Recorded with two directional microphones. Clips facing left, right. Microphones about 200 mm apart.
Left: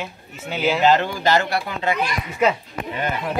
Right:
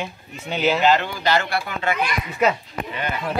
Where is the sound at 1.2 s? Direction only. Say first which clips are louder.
Left 2 dB; 40° left (ahead or behind).